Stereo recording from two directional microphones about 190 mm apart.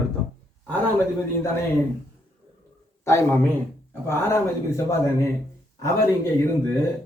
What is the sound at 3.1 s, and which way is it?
A man's voice, 15° left (ahead or behind).